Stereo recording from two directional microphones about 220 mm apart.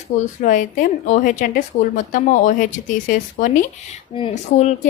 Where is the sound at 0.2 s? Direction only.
35° left (ahead or behind).